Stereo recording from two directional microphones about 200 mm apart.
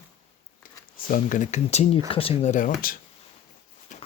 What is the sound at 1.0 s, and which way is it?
Speech, 40° left (ahead or behind).